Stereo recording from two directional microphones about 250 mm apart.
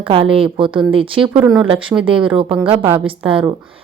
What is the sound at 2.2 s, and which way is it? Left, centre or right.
A woman's voice, centre.